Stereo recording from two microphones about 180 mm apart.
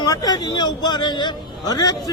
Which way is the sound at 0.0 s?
20° left (ahead or behind).